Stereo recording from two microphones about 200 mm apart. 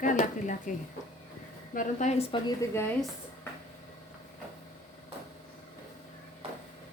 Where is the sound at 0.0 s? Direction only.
40° left (ahead or behind).